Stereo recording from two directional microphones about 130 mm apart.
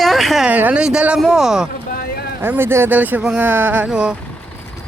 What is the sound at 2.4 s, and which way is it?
Speech, 15° right (ahead or behind).